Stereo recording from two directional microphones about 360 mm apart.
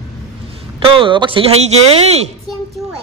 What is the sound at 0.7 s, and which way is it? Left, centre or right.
A woman's voice, centre.